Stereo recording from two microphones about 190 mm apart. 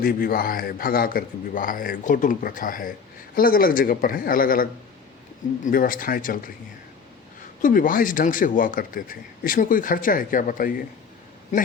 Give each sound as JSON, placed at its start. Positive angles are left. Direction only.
{"t": 0.0, "sound": "speech", "side_deg": 50}
{"t": 7.6, "sound": "a man's voice", "side_deg": 45}